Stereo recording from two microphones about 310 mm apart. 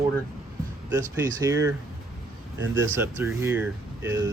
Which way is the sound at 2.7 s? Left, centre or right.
Centre.